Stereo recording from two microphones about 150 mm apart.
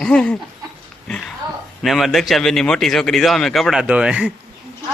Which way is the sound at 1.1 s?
Centre (ahead or behind).